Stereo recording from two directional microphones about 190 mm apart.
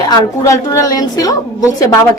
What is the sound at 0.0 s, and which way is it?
A woman's voice, 20° left (ahead or behind).